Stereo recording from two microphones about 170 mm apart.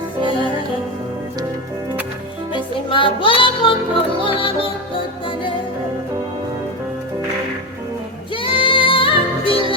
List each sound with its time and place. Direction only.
2.5 s music: 30° left (ahead or behind)
8.4 s music: 30° left (ahead or behind)